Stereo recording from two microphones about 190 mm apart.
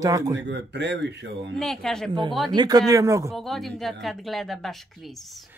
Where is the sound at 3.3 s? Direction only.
Centre (ahead or behind).